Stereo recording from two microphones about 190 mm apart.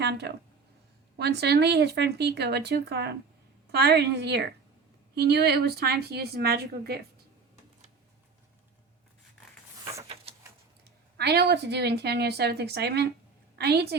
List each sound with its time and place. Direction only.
0.0 s speech: 60° right (ahead or behind)
10.3 s a sound: 30° right (ahead or behind)
11.2 s speech: 60° right (ahead or behind)